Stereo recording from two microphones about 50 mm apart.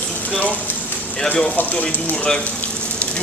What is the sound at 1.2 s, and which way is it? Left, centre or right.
Speech, centre.